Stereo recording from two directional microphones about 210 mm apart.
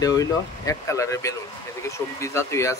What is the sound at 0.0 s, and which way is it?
Speech, 15° left (ahead or behind).